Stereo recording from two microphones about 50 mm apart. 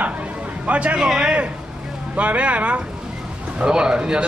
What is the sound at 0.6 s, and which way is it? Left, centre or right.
Speech, right.